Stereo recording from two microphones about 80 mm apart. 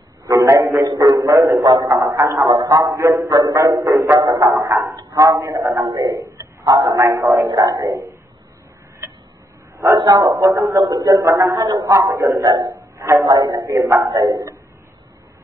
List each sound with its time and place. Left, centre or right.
0.3 s a sound: right
1.8 s a man's voice: right
5.9 s a man's voice: right
6.1 s a sound: right
6.6 s a man's voice: right
9.9 s a man's voice: right
10.8 s a man's voice: right
12.6 s a sound: right
13.3 s a man's voice: right
13.6 s a man's voice: right